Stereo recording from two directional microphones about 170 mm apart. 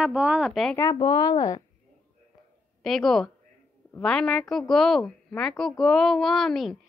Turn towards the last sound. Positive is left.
turn(degrees=0)  # may be behind; listen again after turning